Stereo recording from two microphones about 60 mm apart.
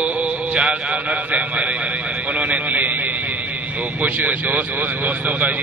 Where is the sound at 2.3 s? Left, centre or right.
Right.